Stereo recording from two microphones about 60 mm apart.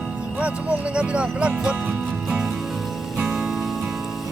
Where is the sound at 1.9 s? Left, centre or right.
Right.